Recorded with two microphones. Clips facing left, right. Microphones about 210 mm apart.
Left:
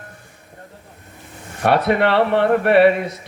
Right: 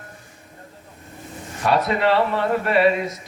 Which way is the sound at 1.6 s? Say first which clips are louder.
Left 3 dB; 65° left (ahead or behind).